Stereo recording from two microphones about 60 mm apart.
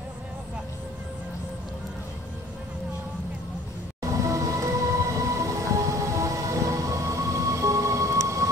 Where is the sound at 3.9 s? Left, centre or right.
Right.